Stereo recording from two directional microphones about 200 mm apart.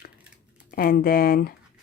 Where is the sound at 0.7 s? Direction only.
45° left (ahead or behind).